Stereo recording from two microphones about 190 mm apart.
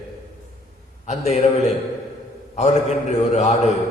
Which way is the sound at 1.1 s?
35° left (ahead or behind).